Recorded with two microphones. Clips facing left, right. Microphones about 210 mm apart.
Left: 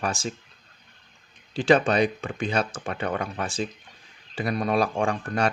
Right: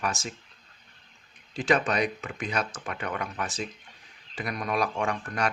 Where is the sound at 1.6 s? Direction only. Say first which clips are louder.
Left 5 dB; 30° left (ahead or behind).